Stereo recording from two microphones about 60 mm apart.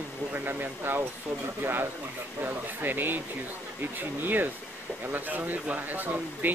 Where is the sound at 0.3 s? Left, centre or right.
Right.